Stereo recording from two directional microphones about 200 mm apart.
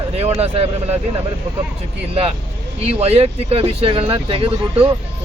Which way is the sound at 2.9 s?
30° right (ahead or behind).